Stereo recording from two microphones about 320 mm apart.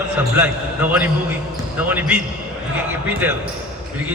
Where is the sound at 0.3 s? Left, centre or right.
Centre.